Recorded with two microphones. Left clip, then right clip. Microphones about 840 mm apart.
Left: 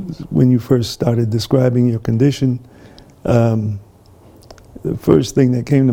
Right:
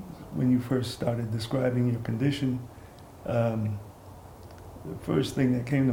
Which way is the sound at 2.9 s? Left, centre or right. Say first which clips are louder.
Left 13 dB; left.